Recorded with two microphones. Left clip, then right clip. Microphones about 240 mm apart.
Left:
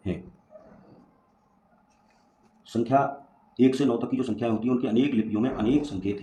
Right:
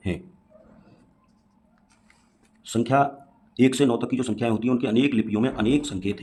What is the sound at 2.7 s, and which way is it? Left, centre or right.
A man's voice, right.